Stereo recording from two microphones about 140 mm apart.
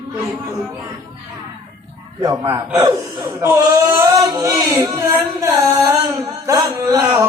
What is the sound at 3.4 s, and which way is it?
Speech, 20° right (ahead or behind).